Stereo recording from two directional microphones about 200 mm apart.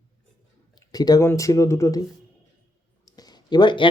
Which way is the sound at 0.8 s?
20° left (ahead or behind).